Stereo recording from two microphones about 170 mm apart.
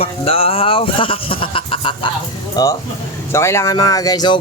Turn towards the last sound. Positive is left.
turn(degrees=25)  # may be behind; listen again after turning